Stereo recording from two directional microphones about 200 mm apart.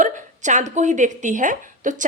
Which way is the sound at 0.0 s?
35° right (ahead or behind).